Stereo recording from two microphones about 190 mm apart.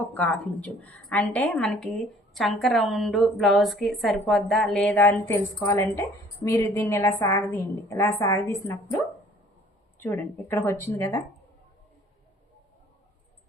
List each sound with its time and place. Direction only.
0.1 s a woman's voice: 10° left (ahead or behind)
10.0 s speech: 10° left (ahead or behind)